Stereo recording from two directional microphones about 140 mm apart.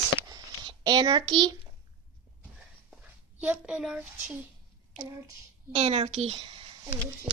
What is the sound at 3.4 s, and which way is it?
Speech, 10° right (ahead or behind).